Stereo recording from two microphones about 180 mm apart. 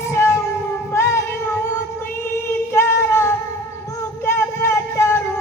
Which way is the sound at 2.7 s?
15° left (ahead or behind).